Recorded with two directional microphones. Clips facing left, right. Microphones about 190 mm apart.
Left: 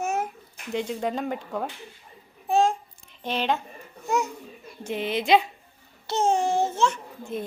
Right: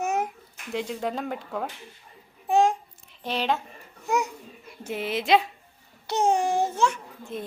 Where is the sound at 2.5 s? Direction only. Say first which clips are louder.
Right 1 dB; 15° right (ahead or behind).